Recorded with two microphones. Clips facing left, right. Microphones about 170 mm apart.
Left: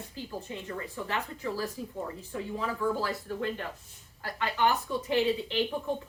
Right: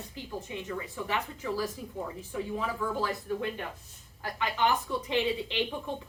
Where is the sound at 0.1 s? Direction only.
15° right (ahead or behind).